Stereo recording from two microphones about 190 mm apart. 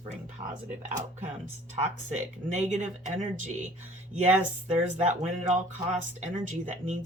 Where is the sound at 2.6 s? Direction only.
40° right (ahead or behind).